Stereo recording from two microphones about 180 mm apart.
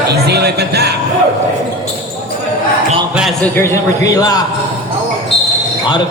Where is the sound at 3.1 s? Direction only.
5° right (ahead or behind).